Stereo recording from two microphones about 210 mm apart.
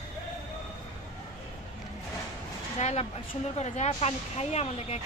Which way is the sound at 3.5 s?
35° left (ahead or behind).